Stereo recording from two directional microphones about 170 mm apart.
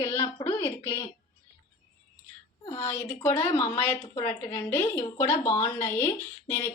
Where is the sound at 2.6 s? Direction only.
15° left (ahead or behind).